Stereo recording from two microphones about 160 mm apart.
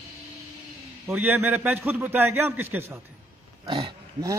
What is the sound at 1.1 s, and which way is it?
Speech, 10° right (ahead or behind).